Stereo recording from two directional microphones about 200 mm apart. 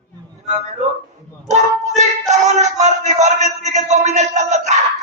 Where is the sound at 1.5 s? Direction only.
35° right (ahead or behind).